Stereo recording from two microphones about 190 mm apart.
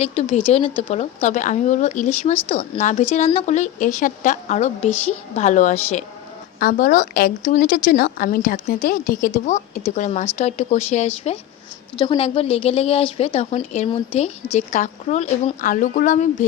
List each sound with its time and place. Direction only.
0.0 s a woman's voice: 30° left (ahead or behind)